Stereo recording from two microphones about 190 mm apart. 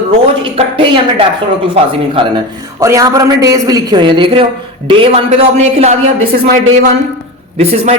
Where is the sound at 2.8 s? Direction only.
15° right (ahead or behind); by 6.0 s 35° right (ahead or behind).